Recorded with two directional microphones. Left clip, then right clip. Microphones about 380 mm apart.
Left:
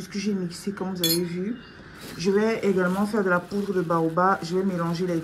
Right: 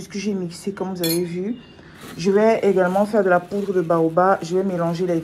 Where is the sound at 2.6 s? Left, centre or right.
Right.